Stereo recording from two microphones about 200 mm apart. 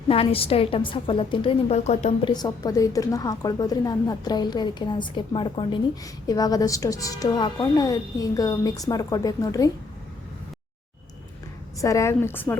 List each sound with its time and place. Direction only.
0.1 s a woman's voice: 30° left (ahead or behind)
2.3 s a woman's voice: 20° left (ahead or behind)
11.8 s a woman's voice: 15° left (ahead or behind)